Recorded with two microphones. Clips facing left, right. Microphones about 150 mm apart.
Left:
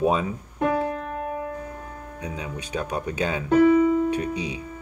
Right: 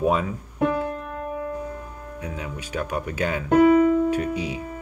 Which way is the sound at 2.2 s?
15° left (ahead or behind).